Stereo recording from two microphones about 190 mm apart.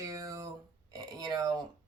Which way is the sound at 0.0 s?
15° right (ahead or behind).